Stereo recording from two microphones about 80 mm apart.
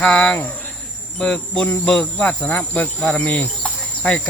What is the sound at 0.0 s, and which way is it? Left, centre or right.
Speech, centre.